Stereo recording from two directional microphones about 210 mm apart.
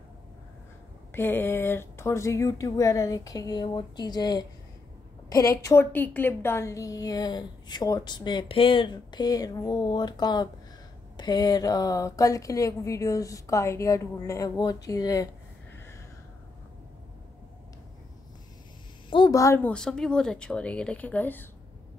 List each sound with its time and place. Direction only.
1.1 s a woman's voice: 10° left (ahead or behind)
19.0 s speech: 20° left (ahead or behind)